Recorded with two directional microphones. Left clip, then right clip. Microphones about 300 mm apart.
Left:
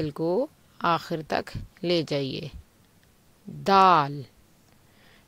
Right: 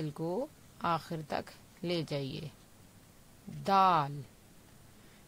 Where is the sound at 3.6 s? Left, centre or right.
Centre.